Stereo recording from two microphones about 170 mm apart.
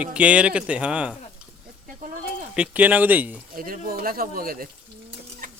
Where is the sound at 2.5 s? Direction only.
5° right (ahead or behind).